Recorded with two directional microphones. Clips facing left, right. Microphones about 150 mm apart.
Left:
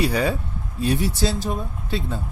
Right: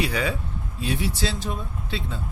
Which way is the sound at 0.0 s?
40° left (ahead or behind).